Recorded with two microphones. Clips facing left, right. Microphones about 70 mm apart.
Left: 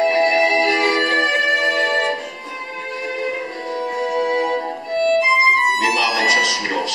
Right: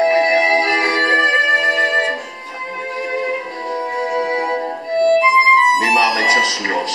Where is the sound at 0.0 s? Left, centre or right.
Right.